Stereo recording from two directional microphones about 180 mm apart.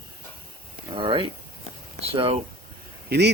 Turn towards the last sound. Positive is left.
turn(degrees=-60)  # may be behind; listen again after turning